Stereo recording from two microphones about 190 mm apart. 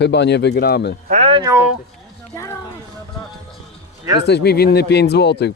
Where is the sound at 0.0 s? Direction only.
65° left (ahead or behind).